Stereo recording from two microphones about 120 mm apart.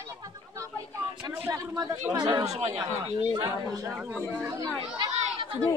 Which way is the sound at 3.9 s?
10° right (ahead or behind).